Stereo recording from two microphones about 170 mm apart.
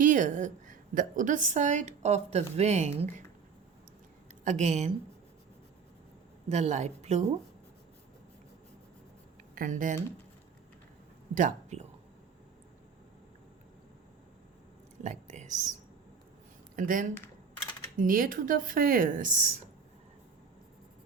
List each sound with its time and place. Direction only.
0.0 s a woman's voice: 50° right (ahead or behind)
4.4 s a woman's voice: 45° right (ahead or behind)
6.5 s a woman's voice: 45° right (ahead or behind)
9.6 s a woman's voice: 50° right (ahead or behind)
11.3 s a woman's voice: 45° right (ahead or behind)
15.0 s whispering: 45° right (ahead or behind)
16.7 s speech: 55° right (ahead or behind)